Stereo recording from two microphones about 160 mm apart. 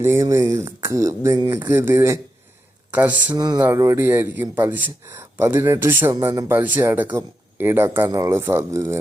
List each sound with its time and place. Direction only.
0.0 s speech: 15° right (ahead or behind)
3.3 s speech: 25° right (ahead or behind)